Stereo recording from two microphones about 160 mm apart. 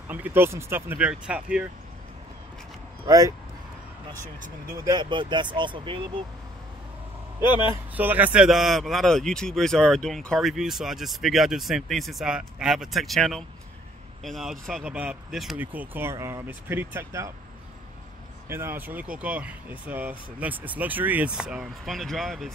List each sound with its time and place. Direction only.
0.1 s speech: 10° right (ahead or behind)
3.1 s speech: 20° right (ahead or behind)
4.7 s speech: 25° right (ahead or behind)
7.4 s speech: 30° left (ahead or behind)
7.9 s speech: 10° right (ahead or behind)
18.5 s speech: 15° right (ahead or behind)